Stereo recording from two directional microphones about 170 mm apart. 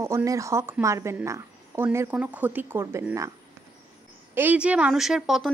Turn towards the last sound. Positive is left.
turn(degrees=0)  # may be behind; listen again after turning